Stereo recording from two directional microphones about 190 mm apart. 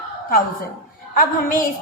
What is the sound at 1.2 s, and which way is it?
Speech, 45° left (ahead or behind).